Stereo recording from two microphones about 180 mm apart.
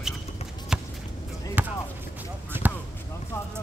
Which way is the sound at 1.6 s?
10° right (ahead or behind).